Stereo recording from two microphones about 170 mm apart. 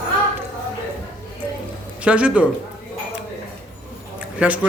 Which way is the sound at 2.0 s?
5° right (ahead or behind).